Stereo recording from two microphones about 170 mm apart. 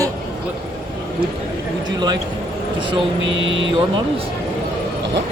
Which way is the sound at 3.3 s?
90° right.